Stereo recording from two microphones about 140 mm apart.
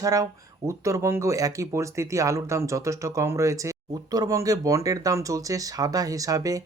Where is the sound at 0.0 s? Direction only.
25° right (ahead or behind).